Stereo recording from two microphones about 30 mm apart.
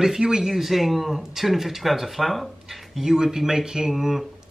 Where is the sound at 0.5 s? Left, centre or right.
Centre.